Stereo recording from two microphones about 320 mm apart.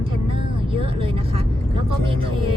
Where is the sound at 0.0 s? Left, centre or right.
Centre.